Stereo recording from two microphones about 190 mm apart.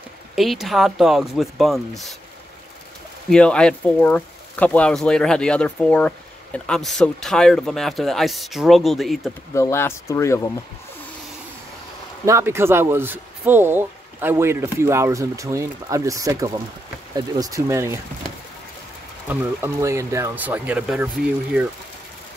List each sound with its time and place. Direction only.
0.4 s speech: centre (ahead or behind)
3.3 s speech: 5° left (ahead or behind)
9.5 s speech: 15° left (ahead or behind)
12.3 s speech: 15° right (ahead or behind)
19.2 s speech: 15° right (ahead or behind)